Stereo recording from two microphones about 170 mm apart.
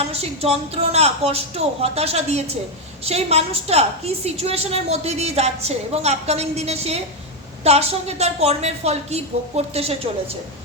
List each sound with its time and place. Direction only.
0.1 s a woman's voice: 35° right (ahead or behind)